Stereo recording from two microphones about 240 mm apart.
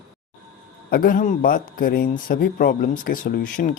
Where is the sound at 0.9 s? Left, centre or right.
Left.